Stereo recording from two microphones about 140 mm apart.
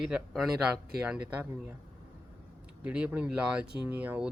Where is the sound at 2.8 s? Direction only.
10° right (ahead or behind).